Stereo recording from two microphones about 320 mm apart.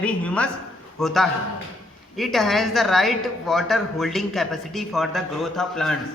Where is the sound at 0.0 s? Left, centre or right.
Centre.